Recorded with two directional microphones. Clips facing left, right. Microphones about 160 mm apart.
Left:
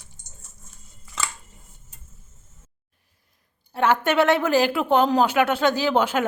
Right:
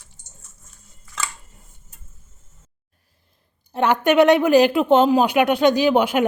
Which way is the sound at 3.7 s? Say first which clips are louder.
Right 3 dB; 15° right (ahead or behind).